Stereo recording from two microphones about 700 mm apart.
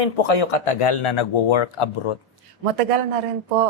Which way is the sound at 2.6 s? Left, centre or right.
Right.